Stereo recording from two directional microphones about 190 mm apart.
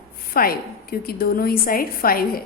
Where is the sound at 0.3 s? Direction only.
50° left (ahead or behind).